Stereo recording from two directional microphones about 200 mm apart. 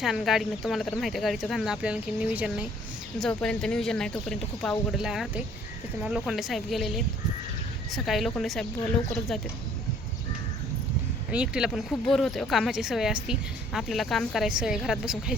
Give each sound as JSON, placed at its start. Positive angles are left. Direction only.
{"t": 0.0, "sound": "speech", "side_deg": 0}
{"t": 11.3, "sound": "speech", "side_deg": -5}